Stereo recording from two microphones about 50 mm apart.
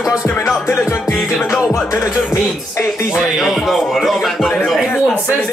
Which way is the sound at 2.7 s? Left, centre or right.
Left.